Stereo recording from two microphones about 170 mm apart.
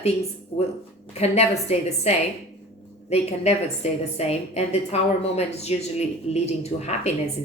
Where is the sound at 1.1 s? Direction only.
40° left (ahead or behind).